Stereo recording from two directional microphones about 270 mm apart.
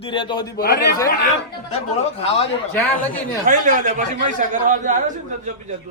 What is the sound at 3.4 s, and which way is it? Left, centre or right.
A man's voice, right.